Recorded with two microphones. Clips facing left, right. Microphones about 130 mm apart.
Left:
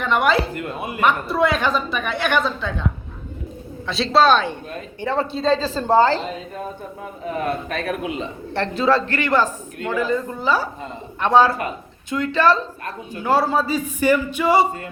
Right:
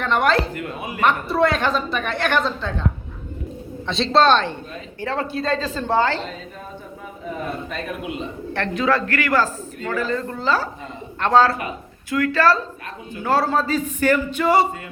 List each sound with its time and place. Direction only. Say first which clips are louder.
0.0 s a man's voice: even; 10° left (ahead or behind)
3.8 s a woman's voice: even; 5° left (ahead or behind)
4.9 s a woman's voice: left 2 dB; 20° left (ahead or behind); by 6.2 s 40° left (ahead or behind)
7.3 s a man's voice: left 4 dB; 65° left (ahead or behind)
8.5 s a man's voice: left 2 dB; 30° left (ahead or behind); by 14.7 s 10° left (ahead or behind)